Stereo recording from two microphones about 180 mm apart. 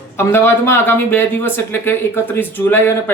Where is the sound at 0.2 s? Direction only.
15° left (ahead or behind).